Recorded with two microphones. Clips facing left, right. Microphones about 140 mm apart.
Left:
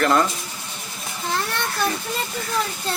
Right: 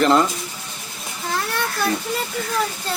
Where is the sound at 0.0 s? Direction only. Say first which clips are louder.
Right 3 dB; 20° right (ahead or behind).